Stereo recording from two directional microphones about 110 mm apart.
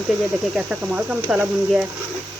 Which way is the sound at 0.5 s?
10° right (ahead or behind).